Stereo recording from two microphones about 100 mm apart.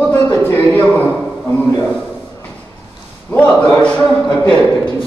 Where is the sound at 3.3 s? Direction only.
15° left (ahead or behind).